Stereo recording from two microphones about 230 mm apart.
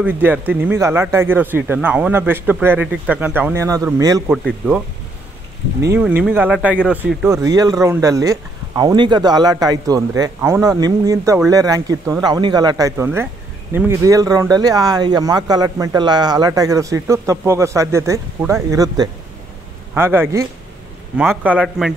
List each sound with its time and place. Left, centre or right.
0.0 s speech: centre
4.3 s speech: centre
7.3 s speech: centre